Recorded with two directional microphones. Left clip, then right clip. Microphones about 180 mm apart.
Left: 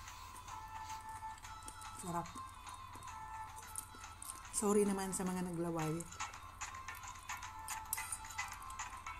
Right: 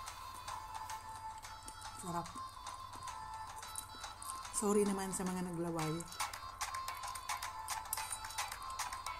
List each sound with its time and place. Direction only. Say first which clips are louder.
2.1 s a woman's voice: even; centre (ahead or behind)
4.6 s a woman's voice: even; centre (ahead or behind)
7.9 s music: right 2 dB; 35° right (ahead or behind)